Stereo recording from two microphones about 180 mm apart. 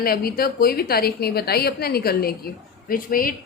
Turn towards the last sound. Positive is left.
turn(degrees=50)  # may be behind; listen again after turning